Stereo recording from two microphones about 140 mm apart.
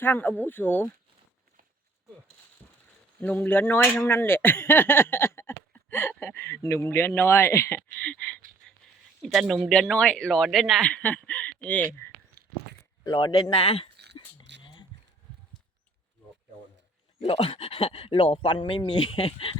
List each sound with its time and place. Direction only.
0.0 s speech: 15° left (ahead or behind)
2.6 s a sound: 15° left (ahead or behind)
3.2 s speech: 10° left (ahead or behind)
12.4 s walk: 90° right
13.1 s speech: 30° left (ahead or behind)
13.3 s keys jangling: 45° left (ahead or behind)
17.2 s speech: 45° left (ahead or behind)